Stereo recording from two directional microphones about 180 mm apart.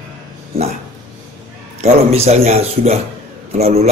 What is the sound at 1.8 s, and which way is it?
A man's voice, 35° right (ahead or behind).